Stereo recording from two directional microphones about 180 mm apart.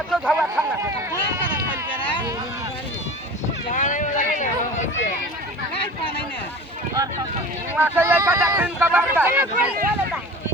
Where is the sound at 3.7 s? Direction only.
45° left (ahead or behind).